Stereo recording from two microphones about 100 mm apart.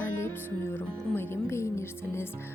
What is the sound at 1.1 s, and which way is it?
Music, 25° left (ahead or behind).